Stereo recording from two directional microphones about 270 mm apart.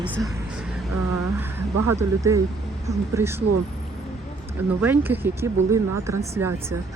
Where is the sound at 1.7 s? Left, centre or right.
Right.